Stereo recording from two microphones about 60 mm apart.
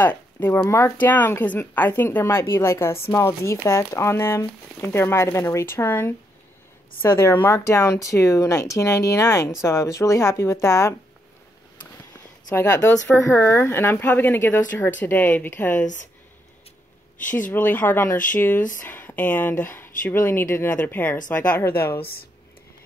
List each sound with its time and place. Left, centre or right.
0.0 s speech: left
0.7 s speech: left
0.9 s speech: left
7.4 s speech: left
13.3 s speech: left
17.3 s speech: left